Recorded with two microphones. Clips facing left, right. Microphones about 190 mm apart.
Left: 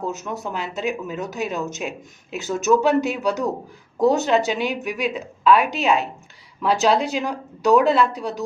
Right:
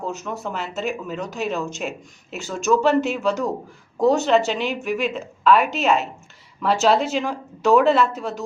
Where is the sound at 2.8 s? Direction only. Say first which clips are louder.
Even; centre (ahead or behind).